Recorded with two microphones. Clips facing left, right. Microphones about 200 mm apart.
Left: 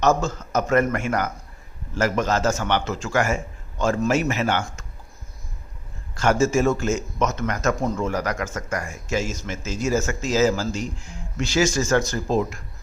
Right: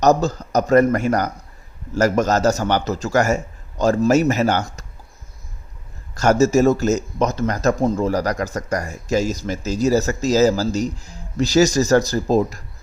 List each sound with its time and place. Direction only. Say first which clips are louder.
0.0 s speech: right 4 dB; 40° right (ahead or behind)
6.1 s speech: right 5 dB; 40° right (ahead or behind)